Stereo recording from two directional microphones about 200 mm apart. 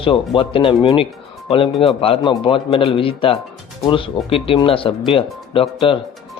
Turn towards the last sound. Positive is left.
turn(degrees=25)  # may be behind; listen again after turning